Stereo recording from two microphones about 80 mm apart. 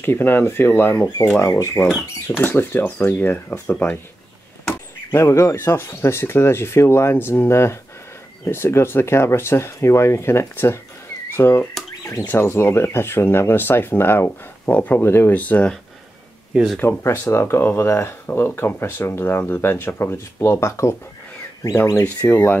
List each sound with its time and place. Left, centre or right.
0.0 s speech: left
1.4 s speech: left
2.3 s speech: left
5.1 s speech: left; by 15.7 s centre
16.8 s speech: left
22.0 s speech: left